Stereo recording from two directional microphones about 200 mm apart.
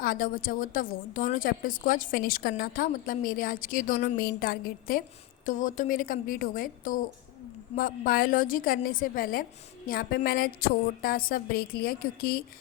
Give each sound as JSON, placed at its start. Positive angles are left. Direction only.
{"t": 0.0, "sound": "a woman's voice", "side_deg": 45}